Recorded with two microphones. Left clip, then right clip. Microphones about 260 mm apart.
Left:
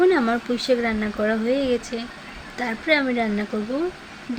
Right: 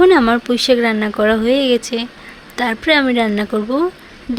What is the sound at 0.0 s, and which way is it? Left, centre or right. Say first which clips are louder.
Speech: right 8 dB; right.